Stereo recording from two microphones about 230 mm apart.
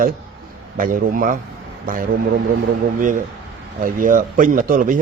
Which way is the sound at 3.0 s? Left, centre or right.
Right.